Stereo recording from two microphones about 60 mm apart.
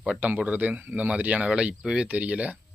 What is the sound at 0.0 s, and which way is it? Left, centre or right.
Speech, right.